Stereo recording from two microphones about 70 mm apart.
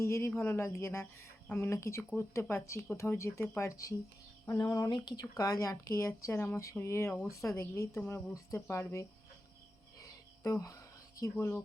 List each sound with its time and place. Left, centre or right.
0.0 s speech: left
0.3 s speech: left
1.5 s speech: left
1.7 s speech: left
5.2 s speech: left
10.0 s a sound: left
11.2 s speech: left